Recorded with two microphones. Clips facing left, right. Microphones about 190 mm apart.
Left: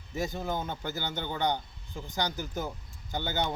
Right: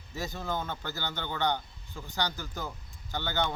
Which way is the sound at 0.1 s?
15° left (ahead or behind).